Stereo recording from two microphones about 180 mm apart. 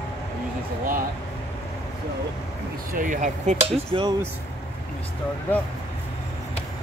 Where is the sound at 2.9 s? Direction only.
45° right (ahead or behind); by 4.1 s 30° right (ahead or behind).